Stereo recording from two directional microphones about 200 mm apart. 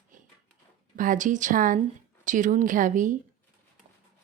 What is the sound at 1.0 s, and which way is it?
Speech, 40° right (ahead or behind).